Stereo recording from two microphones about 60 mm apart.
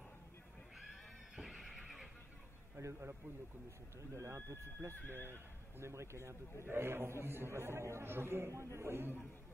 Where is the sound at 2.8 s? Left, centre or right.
Right.